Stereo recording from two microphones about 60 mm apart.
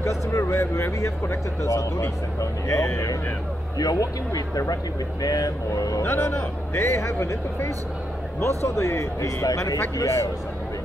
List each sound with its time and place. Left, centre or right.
0.0 s speech: left
3.7 s speech: left
6.0 s speech: left